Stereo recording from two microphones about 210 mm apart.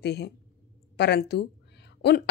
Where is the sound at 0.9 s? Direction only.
50° left (ahead or behind).